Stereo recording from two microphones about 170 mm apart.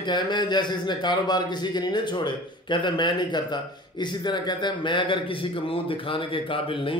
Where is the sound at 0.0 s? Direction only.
25° left (ahead or behind).